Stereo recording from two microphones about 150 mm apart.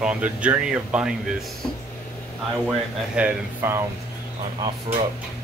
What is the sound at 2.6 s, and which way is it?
Speech, 10° right (ahead or behind).